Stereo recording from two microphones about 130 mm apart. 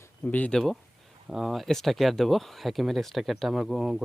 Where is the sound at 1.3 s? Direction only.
5° right (ahead or behind).